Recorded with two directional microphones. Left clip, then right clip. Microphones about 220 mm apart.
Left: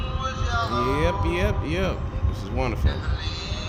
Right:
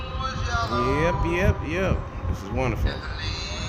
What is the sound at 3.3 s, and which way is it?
Music, 25° right (ahead or behind).